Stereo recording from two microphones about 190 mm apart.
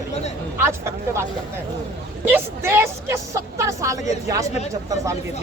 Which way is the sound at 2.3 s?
10° right (ahead or behind).